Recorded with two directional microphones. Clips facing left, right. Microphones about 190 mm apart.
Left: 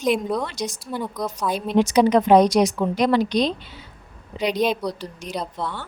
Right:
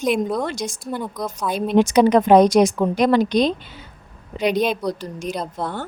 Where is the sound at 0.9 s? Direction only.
Centre (ahead or behind).